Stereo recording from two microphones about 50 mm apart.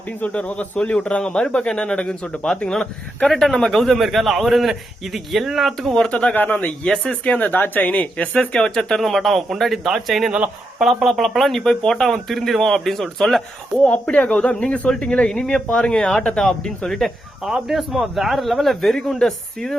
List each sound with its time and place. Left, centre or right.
0.2 s speech: left
3.2 s speech: centre
6.1 s speech: left
6.3 s speech: left
6.8 s speech: centre; by 8.0 s left
8.0 s speech: left; by 13.8 s centre
13.8 s speech: left; by 17.1 s centre
17.4 s speech: centre